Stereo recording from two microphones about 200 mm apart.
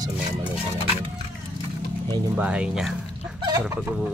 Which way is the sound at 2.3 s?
5° right (ahead or behind).